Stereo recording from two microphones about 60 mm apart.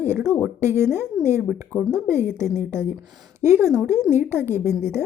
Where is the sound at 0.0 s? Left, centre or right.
Right.